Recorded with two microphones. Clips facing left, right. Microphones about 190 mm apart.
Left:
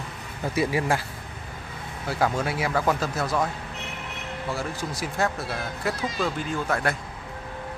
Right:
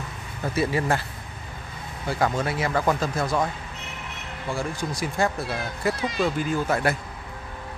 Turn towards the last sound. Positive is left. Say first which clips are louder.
# right 3 dB
turn(degrees=-5)  # may be behind; listen again after turning